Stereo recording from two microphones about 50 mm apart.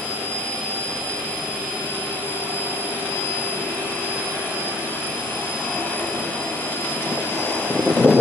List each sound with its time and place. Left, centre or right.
7.9 s vehicle: centre